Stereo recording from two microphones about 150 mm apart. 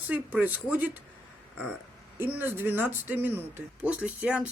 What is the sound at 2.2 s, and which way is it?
Speech, 15° right (ahead or behind).